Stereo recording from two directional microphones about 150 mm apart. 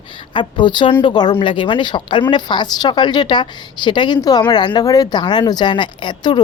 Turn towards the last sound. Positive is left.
turn(degrees=30)  # may be behind; listen again after turning